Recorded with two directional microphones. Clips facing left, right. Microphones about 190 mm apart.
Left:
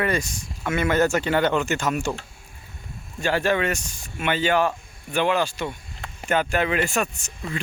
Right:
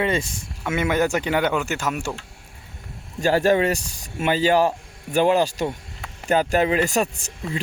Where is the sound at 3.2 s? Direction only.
40° right (ahead or behind).